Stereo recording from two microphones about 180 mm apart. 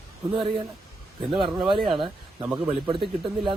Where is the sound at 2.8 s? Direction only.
25° right (ahead or behind).